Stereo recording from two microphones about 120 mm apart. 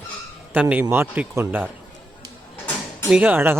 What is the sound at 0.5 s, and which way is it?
A man's voice, 10° right (ahead or behind).